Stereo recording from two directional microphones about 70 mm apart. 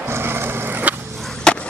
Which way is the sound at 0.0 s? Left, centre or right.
Right.